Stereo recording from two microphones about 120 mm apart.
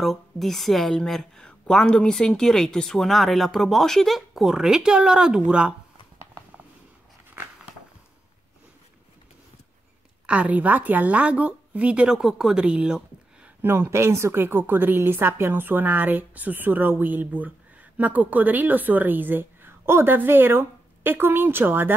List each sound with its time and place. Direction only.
0.0 s a woman's voice: centre (ahead or behind)
10.2 s a woman's voice: 10° right (ahead or behind)
13.6 s a woman's voice: 20° right (ahead or behind)